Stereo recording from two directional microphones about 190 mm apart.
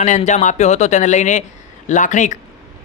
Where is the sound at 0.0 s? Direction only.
40° left (ahead or behind).